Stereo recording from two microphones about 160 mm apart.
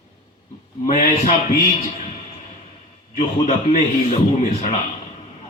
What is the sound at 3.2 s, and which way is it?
Speech, 50° left (ahead or behind).